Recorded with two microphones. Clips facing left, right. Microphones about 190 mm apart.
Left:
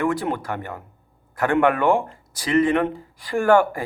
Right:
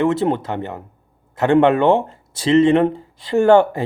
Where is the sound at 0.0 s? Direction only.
25° right (ahead or behind).